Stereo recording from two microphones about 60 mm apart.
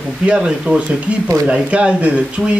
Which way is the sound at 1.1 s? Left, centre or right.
Right.